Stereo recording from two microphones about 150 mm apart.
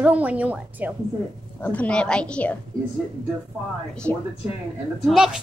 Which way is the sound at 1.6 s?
10° left (ahead or behind).